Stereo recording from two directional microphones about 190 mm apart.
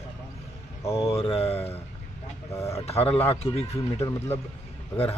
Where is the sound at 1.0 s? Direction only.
30° left (ahead or behind).